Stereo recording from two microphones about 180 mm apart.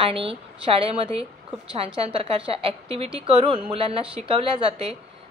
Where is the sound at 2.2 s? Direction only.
30° right (ahead or behind).